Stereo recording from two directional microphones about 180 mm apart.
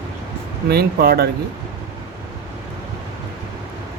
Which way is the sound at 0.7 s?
60° right (ahead or behind).